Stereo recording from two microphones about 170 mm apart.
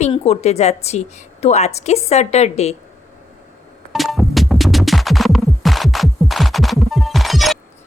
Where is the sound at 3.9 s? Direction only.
Centre (ahead or behind).